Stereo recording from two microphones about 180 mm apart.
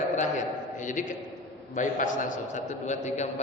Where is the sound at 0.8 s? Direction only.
45° left (ahead or behind).